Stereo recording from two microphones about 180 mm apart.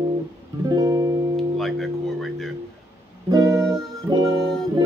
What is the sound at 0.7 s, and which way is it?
Music, 20° right (ahead or behind).